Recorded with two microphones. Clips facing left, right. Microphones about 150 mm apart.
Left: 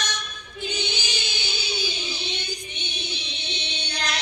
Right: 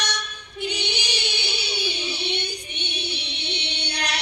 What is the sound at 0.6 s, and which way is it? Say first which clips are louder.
Child singing: right 2 dB; 70° right (ahead or behind).